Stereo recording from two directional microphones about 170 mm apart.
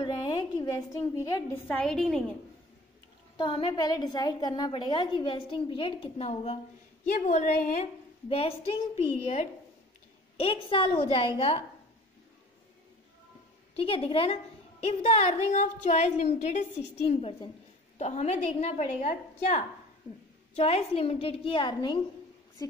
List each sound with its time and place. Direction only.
0.0 s a sound: 25° left (ahead or behind)
1.7 s a woman's voice: 5° left (ahead or behind)
3.3 s a woman's voice: 30° left (ahead or behind)
13.7 s a woman's voice: 35° left (ahead or behind)